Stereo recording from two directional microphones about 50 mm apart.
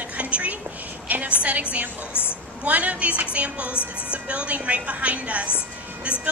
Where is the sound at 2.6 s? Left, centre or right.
Right.